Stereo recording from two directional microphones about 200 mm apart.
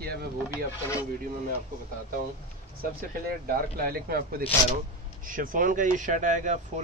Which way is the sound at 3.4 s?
50° right (ahead or behind).